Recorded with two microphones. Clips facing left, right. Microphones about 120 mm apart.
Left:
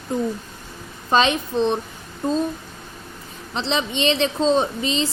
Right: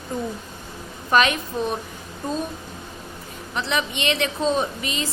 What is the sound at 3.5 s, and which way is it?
A woman's voice, 25° left (ahead or behind).